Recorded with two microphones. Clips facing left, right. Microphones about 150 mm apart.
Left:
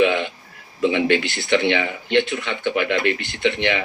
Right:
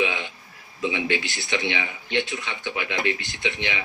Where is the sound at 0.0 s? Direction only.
65° left (ahead or behind).